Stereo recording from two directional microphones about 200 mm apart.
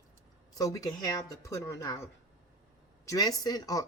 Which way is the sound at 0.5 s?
20° left (ahead or behind).